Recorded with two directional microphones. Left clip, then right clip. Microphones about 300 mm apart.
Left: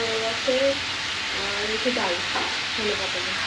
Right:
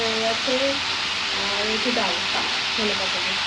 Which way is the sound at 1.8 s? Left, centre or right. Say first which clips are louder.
Right 2 dB; centre.